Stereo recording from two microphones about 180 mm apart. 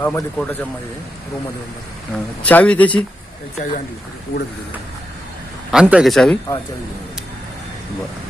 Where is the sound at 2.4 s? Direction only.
5° left (ahead or behind).